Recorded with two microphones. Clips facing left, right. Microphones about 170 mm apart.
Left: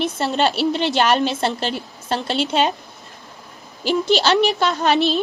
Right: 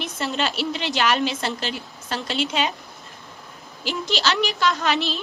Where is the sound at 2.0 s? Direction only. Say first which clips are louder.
Left 6 dB; 30° left (ahead or behind).